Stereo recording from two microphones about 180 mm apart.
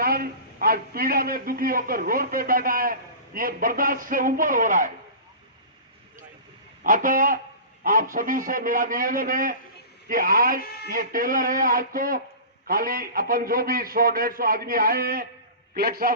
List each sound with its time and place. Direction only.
0.0 s a man's voice: 55° right (ahead or behind)
6.8 s a man's voice: 50° right (ahead or behind)